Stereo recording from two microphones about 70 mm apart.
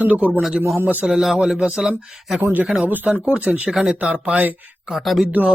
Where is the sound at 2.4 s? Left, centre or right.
Right.